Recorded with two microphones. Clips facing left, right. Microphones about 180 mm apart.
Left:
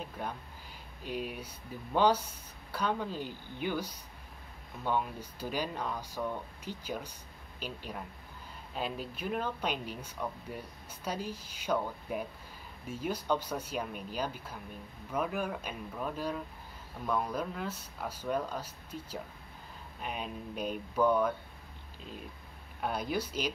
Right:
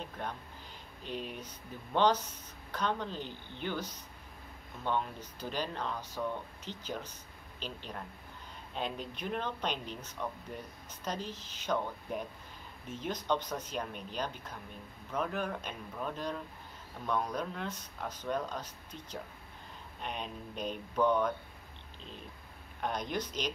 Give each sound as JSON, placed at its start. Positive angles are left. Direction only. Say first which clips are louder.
{"t": 0.0, "sound": "speech", "louder": "left 1 dB", "side_deg": 10}
{"t": 22.8, "sound": "speech", "louder": "left 2 dB", "side_deg": 5}